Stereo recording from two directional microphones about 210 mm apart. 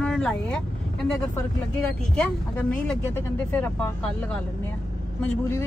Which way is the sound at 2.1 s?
5° left (ahead or behind).